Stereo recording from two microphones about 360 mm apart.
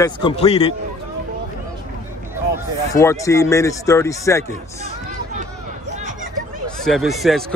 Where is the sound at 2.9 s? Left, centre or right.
Centre.